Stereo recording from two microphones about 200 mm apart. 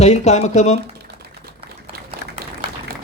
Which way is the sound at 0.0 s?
35° left (ahead or behind).